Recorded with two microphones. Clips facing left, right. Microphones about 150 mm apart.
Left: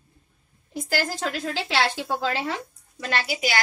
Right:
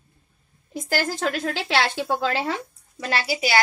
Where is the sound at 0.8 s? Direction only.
60° right (ahead or behind).